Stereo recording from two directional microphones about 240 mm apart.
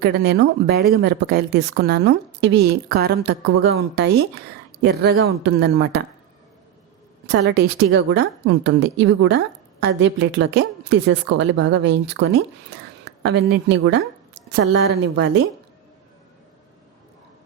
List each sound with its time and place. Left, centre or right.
0.0 s a woman's voice: right
7.3 s a woman's voice: right